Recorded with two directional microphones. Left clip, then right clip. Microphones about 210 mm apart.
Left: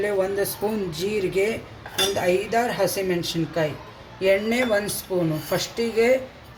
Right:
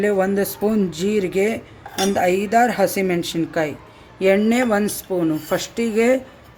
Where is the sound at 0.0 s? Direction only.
40° right (ahead or behind).